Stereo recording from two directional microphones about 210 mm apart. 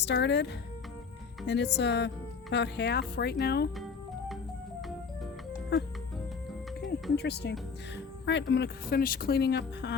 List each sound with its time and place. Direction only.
0.0 s speech: 55° left (ahead or behind)
7.2 s speech: 50° left (ahead or behind)